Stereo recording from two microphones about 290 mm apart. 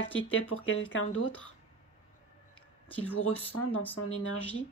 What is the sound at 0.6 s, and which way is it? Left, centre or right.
Speech, left.